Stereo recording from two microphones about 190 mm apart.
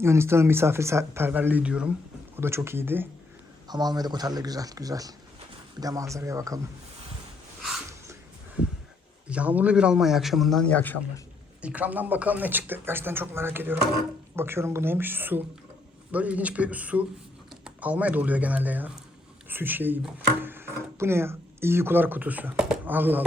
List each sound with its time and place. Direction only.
0.0 s speech: 15° right (ahead or behind)
3.7 s speech: 20° right (ahead or behind)
9.3 s a man's voice: 10° right (ahead or behind)
11.6 s speech: 10° right (ahead or behind)